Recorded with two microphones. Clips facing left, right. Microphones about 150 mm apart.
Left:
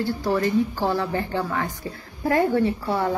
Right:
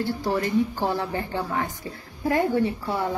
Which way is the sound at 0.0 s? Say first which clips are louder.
Left 2 dB; 20° right (ahead or behind).